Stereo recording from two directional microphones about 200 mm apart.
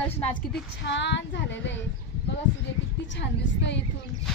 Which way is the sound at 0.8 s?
60° left (ahead or behind).